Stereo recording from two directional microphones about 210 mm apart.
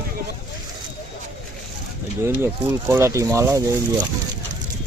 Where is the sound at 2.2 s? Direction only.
10° right (ahead or behind).